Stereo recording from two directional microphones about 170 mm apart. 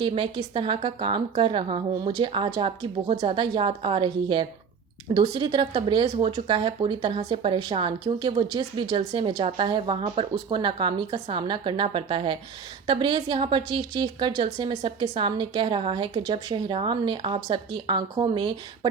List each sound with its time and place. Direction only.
0.0 s a woman's voice: 30° right (ahead or behind)